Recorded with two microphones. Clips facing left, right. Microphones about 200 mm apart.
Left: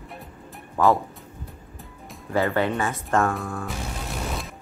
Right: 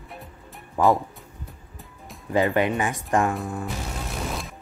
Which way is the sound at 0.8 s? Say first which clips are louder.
Even; 15° right (ahead or behind).